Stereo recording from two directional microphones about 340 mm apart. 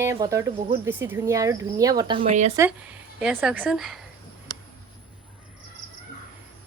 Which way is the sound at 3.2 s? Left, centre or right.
Centre.